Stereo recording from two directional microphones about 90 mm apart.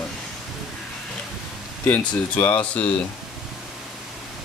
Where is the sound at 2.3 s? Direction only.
15° left (ahead or behind).